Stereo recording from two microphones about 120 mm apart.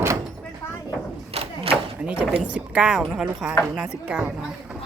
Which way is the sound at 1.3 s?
55° right (ahead or behind).